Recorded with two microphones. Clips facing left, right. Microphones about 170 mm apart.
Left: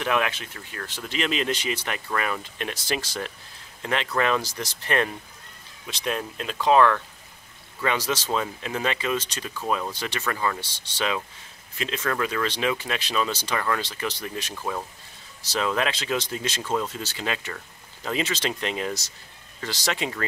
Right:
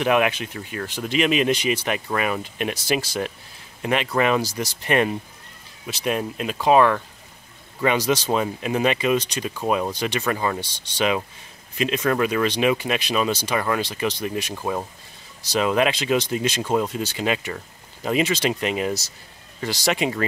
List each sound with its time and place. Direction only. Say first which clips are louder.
0.0 s speech: right 6 dB; 15° right (ahead or behind)